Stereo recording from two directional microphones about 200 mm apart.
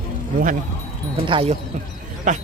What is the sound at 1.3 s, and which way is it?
Speech, 25° right (ahead or behind).